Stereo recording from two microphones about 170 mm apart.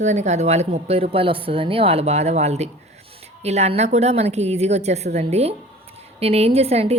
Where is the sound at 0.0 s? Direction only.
45° right (ahead or behind).